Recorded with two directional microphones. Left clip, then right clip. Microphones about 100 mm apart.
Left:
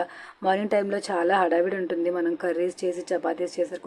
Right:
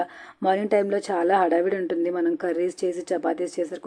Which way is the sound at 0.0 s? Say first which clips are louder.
Right 2 dB; 25° right (ahead or behind).